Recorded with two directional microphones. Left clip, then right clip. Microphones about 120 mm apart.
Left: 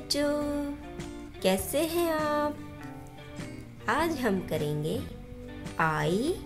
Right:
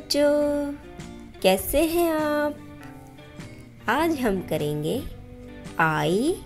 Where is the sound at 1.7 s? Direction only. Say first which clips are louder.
Right 6 dB; 30° right (ahead or behind).